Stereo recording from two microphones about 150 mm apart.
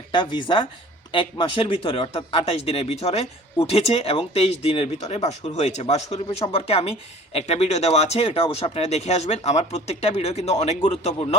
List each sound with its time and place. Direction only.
0.1 s speech: 30° left (ahead or behind)